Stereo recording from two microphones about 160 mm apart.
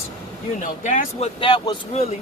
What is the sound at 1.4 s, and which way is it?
Speech, 30° left (ahead or behind).